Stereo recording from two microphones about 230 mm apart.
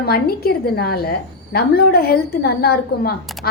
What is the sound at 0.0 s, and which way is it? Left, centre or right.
A woman's voice, left.